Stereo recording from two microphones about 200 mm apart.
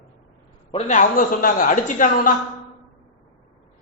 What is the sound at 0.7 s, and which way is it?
A man's voice, 40° left (ahead or behind).